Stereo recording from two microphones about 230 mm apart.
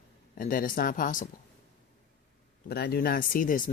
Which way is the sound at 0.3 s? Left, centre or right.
Left.